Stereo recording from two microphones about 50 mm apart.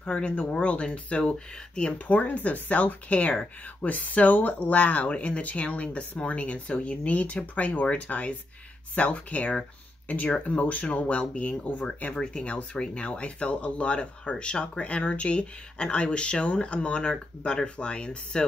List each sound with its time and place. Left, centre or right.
0.0 s speech: left
2.1 s speech: left
12.2 s speech: centre